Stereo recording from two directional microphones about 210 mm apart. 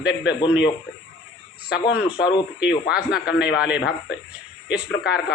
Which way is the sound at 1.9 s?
5° right (ahead or behind).